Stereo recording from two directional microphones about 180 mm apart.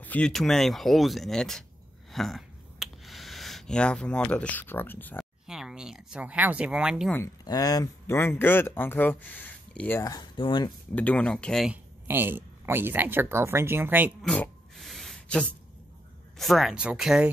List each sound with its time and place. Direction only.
0.0 s speech: 5° left (ahead or behind)
2.0 s a sound: centre (ahead or behind)
4.3 s speech: 5° left (ahead or behind)
5.5 s speech: 5° right (ahead or behind)
7.4 s speech: 20° left (ahead or behind)
11.0 s speech: 5° left (ahead or behind); by 14.1 s 10° right (ahead or behind)
14.2 s a sound: 5° left (ahead or behind)
16.3 s speech: centre (ahead or behind)